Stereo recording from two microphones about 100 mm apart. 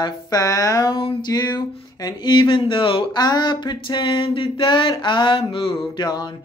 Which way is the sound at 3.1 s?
45° left (ahead or behind).